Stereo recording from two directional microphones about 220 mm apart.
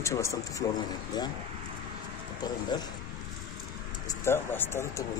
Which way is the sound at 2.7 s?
20° left (ahead or behind).